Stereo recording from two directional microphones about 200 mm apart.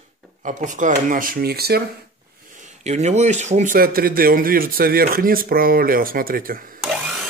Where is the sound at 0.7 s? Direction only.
40° right (ahead or behind).